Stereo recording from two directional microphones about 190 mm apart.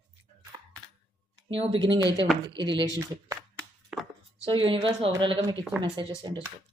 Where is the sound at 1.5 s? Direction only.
30° right (ahead or behind).